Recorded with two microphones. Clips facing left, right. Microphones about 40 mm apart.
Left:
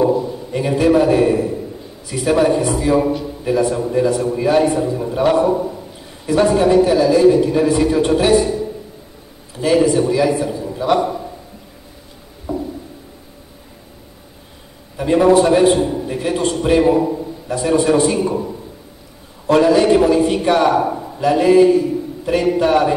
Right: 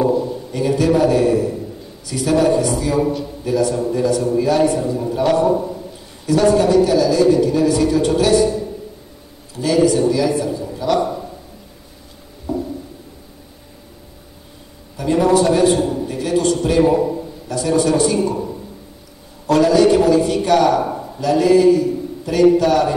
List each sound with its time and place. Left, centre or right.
0.0 s a man's voice: left
9.6 s a man's voice: left
12.5 s a sound: centre
15.0 s a man's voice: left
17.5 s a man's voice: left
19.4 s a man's voice: left